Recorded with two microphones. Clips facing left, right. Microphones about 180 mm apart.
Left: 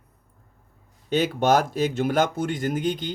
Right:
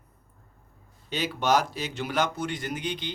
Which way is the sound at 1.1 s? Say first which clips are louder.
Left 5 dB; 50° left (ahead or behind).